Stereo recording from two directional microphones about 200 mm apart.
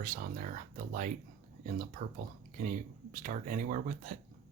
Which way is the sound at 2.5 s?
40° right (ahead or behind).